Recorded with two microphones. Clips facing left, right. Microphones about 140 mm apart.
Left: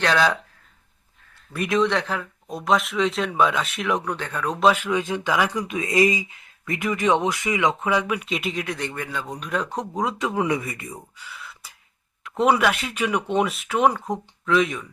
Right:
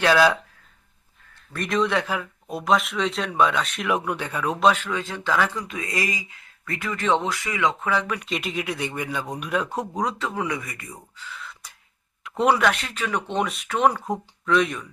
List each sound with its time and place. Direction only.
0.0 s speech: 5° right (ahead or behind)
1.5 s speech: 5° left (ahead or behind)
4.6 s speech: 10° left (ahead or behind)
10.2 s speech: 20° left (ahead or behind)
11.2 s a sound: 10° left (ahead or behind)
12.2 s speech: centre (ahead or behind)